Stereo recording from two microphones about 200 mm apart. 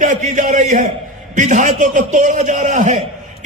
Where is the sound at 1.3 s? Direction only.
40° right (ahead or behind).